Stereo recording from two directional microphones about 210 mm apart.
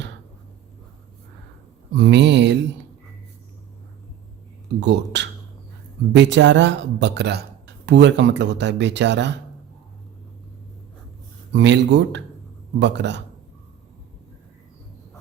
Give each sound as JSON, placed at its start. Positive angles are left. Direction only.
{"t": 2.0, "sound": "speech", "side_deg": -55}
{"t": 4.8, "sound": "speech", "side_deg": -55}
{"t": 11.5, "sound": "speech", "side_deg": -55}